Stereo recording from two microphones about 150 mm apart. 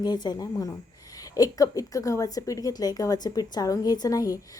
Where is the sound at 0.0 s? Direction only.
30° left (ahead or behind).